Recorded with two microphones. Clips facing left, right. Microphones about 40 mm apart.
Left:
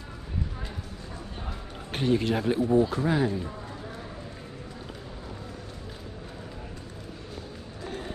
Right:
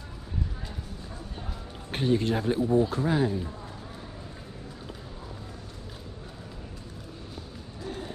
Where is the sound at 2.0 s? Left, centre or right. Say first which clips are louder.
Left 1 dB; left.